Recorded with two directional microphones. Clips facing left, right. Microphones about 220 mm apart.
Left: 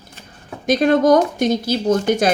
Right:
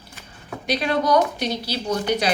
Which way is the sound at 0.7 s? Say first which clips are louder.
Left 8 dB; 45° left (ahead or behind).